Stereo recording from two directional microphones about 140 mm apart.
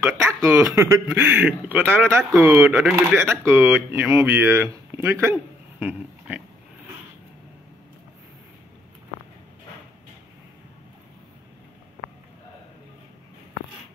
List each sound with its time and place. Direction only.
0.4 s speech: 20° right (ahead or behind)
2.7 s speech: 5° right (ahead or behind)
3.0 s speech: 15° right (ahead or behind)